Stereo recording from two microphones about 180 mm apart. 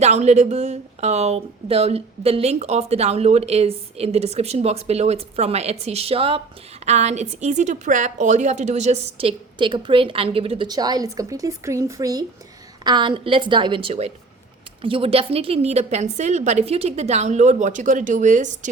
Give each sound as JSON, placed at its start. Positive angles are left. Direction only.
{"t": 0.0, "sound": "a woman's voice", "side_deg": -40}